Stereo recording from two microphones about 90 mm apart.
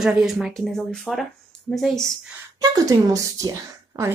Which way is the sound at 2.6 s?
45° right (ahead or behind).